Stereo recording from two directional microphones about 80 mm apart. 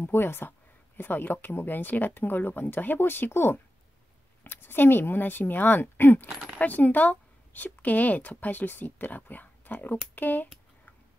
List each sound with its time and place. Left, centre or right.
0.0 s speech: left